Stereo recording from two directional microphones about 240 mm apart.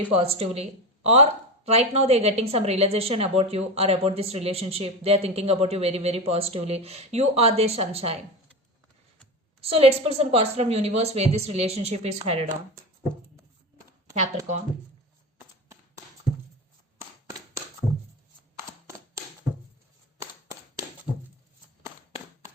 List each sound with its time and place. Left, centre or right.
0.1 s speech: right
9.6 s speech: right
20.1 s a sound: centre